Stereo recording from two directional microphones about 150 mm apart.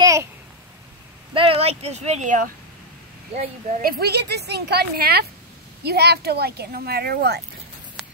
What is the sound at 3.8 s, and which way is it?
Speech, 90° right.